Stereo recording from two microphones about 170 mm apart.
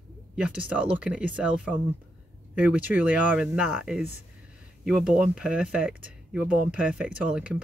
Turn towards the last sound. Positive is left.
turn(degrees=-5)  # may be behind; listen again after turning